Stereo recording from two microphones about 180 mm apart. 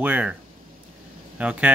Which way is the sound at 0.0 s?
5° right (ahead or behind).